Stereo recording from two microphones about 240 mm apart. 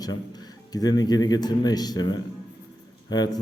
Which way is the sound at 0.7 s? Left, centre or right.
Centre.